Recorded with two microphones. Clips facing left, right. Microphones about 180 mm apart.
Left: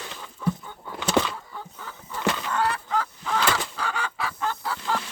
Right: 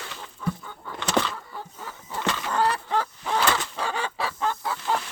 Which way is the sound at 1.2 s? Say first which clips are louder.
Left 2 dB; 15° left (ahead or behind).